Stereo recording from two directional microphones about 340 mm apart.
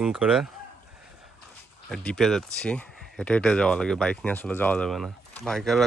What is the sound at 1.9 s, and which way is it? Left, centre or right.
Speech, centre.